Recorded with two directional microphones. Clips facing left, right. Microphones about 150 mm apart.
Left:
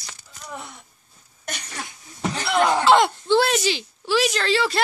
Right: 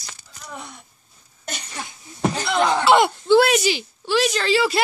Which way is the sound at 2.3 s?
5° left (ahead or behind).